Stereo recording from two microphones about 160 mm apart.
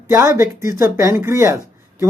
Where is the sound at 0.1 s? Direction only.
15° right (ahead or behind).